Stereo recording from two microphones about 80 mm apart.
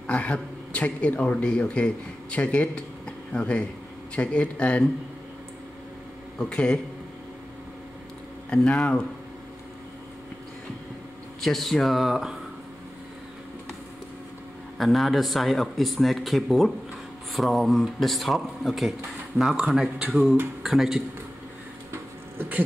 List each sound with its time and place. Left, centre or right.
0.0 s a man's voice: centre
6.3 s a man's voice: centre
8.5 s speech: centre
11.4 s speech: centre
14.8 s speech: centre
21.9 s a sound: right